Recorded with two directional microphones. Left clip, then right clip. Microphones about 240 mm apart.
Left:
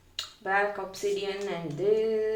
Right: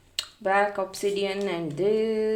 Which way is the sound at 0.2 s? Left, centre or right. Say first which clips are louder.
Right 4 dB; right.